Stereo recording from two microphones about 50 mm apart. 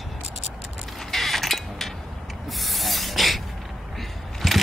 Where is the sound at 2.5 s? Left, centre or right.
Centre.